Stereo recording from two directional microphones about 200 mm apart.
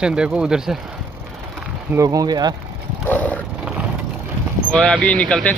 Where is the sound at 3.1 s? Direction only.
5° left (ahead or behind).